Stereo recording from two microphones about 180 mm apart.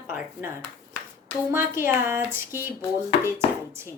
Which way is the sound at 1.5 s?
15° right (ahead or behind).